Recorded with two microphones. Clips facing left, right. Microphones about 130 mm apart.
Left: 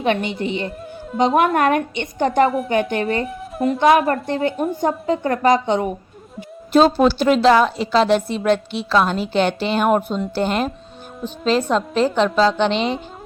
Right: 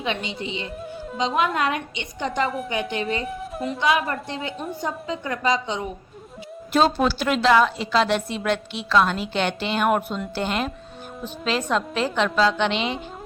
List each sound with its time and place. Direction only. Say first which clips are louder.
0.0 s a woman's voice: left 8 dB; 55° left (ahead or behind)
3.2 s speech: left 7 dB; centre (ahead or behind)
3.8 s a woman's voice: left 8 dB; 55° left (ahead or behind)
6.7 s a woman's voice: left 6 dB; 35° left (ahead or behind)